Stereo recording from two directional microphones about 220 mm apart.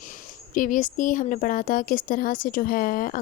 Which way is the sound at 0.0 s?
35° left (ahead or behind).